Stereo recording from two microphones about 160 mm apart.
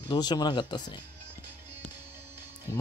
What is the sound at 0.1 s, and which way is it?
Speech, 25° left (ahead or behind).